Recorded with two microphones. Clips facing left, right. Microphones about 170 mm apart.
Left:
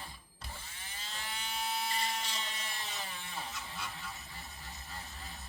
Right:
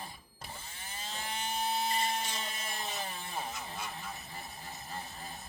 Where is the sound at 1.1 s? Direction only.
40° right (ahead or behind).